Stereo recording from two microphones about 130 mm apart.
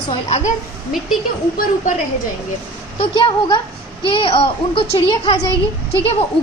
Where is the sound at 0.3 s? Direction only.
55° left (ahead or behind).